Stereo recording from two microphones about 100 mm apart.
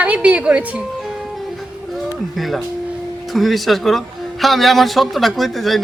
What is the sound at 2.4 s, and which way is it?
Speech, centre (ahead or behind).